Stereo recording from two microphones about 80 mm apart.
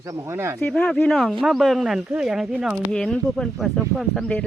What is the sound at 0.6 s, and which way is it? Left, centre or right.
Speech, centre.